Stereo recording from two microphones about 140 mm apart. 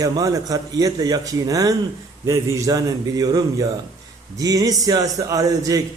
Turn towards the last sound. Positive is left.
turn(degrees=-25)  # may be behind; listen again after turning